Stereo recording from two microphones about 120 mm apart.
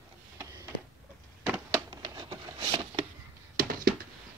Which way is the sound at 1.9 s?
35° right (ahead or behind).